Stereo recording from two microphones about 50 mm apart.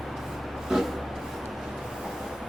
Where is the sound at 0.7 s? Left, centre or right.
Centre.